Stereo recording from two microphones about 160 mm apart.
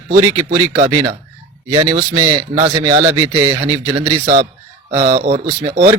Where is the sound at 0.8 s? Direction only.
35° right (ahead or behind).